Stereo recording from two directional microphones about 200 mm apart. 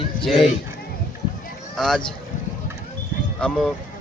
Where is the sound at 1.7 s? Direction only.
Centre (ahead or behind).